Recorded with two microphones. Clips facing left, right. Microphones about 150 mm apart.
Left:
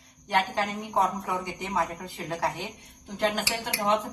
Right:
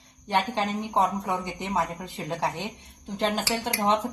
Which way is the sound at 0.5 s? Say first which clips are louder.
Right 2 dB; 25° right (ahead or behind).